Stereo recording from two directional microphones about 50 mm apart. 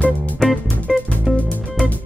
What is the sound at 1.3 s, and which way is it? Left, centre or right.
Music, centre.